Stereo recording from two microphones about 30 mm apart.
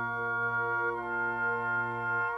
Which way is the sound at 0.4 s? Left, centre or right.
Centre.